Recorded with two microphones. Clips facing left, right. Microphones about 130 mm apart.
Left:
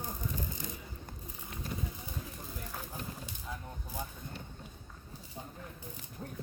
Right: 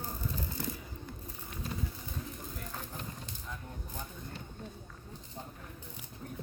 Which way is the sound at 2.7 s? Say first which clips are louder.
Even; 10° left (ahead or behind).